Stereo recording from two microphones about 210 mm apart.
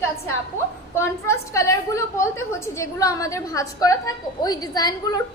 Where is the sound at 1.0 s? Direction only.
15° left (ahead or behind).